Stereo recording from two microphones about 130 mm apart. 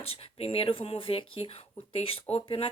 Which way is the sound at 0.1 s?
50° left (ahead or behind).